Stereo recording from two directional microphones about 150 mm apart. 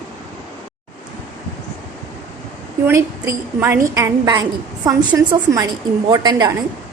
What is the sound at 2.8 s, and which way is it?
A woman's voice, 15° right (ahead or behind).